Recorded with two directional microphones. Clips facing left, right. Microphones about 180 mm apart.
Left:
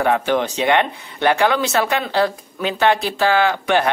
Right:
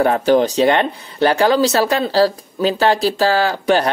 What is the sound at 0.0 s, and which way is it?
Speech, 40° right (ahead or behind).